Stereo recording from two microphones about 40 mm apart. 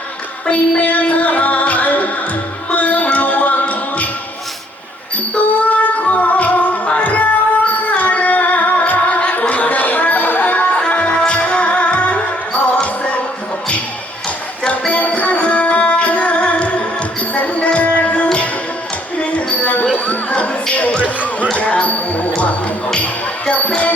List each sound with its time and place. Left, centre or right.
0.8 s music: left
5.4 s music: left
14.7 s music: left